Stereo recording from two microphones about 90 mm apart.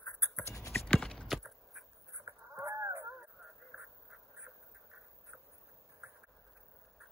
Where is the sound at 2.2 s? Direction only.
35° right (ahead or behind).